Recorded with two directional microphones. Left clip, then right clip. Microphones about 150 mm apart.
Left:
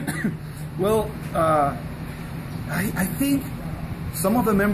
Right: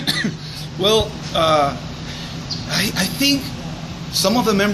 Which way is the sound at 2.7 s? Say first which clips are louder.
Right 7 dB; 20° right (ahead or behind).